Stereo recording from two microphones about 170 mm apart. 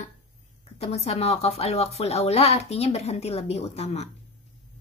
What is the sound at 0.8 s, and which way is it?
Speech, 40° left (ahead or behind).